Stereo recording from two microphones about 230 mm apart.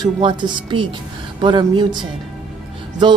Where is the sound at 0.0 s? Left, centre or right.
Right.